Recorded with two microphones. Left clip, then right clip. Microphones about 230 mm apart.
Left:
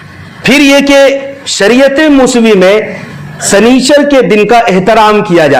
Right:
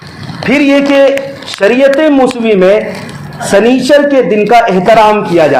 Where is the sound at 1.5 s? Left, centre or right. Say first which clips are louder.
Left 1 dB; left.